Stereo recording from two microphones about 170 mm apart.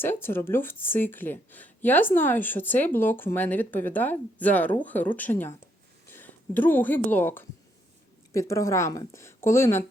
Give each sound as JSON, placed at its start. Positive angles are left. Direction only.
{"t": 0.0, "sound": "speech", "side_deg": 15}